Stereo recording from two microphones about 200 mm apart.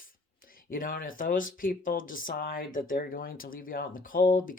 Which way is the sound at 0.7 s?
45° left (ahead or behind).